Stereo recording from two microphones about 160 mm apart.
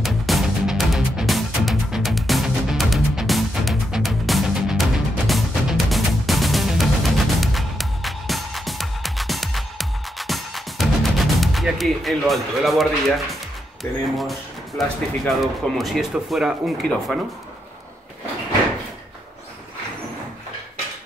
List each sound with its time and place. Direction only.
0.0 s music: centre (ahead or behind)
13.8 s speech: 15° left (ahead or behind)
14.8 s speech: centre (ahead or behind)